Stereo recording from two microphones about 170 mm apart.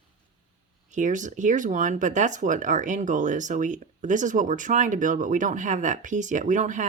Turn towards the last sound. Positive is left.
turn(degrees=-45)  # may be behind; listen again after turning